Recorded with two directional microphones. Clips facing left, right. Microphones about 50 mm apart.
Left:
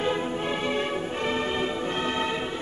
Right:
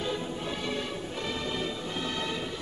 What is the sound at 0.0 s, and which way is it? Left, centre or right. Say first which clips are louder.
Music: left 6 dB; left.